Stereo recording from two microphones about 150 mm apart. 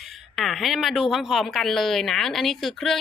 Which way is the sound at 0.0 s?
Centre (ahead or behind).